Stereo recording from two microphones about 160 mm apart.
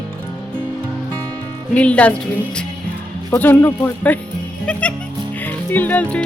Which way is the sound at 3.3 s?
15° left (ahead or behind).